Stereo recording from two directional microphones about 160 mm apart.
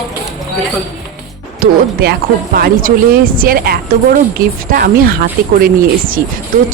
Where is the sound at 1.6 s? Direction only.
70° right (ahead or behind).